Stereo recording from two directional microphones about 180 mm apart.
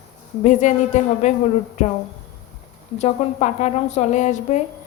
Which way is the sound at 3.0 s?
40° left (ahead or behind).